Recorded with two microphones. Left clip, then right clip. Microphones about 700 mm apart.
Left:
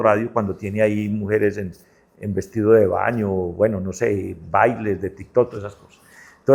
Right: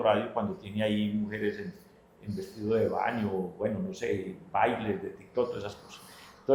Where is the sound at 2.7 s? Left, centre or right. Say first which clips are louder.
Left 12 dB; left.